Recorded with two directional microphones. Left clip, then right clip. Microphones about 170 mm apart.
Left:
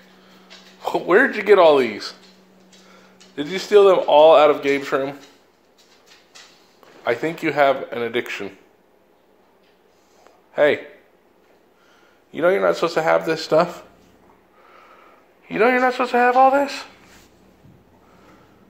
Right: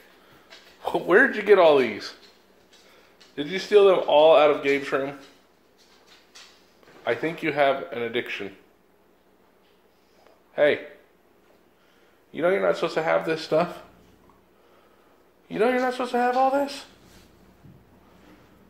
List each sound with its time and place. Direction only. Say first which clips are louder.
0.7 s speech: left 3 dB; 10° left (ahead or behind)
3.3 s speech: left 4 dB; 30° left (ahead or behind)
7.1 s speech: left 4 dB; 30° left (ahead or behind)
10.5 s a man's voice: left 4 dB; 30° left (ahead or behind)
12.3 s speech: left 5 dB; 35° left (ahead or behind)
15.4 s speech: left 6 dB; 20° left (ahead or behind)